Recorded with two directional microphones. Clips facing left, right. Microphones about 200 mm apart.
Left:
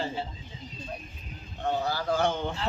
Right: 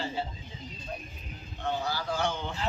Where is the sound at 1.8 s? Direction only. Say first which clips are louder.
Left 6 dB; 50° left (ahead or behind).